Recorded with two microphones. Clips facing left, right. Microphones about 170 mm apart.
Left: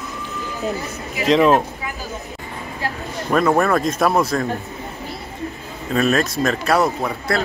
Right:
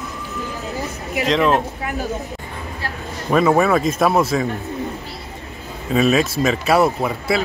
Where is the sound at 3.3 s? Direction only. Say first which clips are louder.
Right 2 dB; 5° right (ahead or behind).